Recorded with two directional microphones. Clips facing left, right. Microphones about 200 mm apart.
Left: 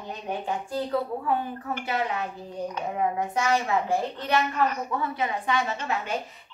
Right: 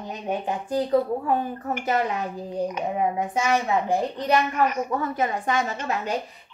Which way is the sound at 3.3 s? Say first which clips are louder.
Right 2 dB; 15° right (ahead or behind).